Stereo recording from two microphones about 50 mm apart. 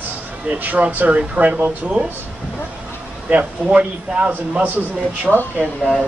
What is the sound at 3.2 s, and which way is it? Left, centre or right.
Speech, right.